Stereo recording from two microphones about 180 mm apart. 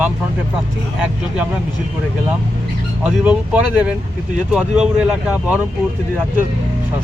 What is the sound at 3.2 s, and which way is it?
Speech, 10° right (ahead or behind).